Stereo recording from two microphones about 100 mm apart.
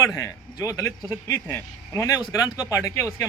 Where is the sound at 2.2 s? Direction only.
45° left (ahead or behind).